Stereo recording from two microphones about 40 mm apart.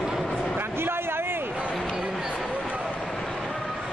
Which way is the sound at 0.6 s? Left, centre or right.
Right.